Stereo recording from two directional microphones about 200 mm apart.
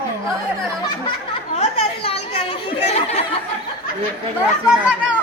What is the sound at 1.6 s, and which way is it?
Chatter, 30° left (ahead or behind).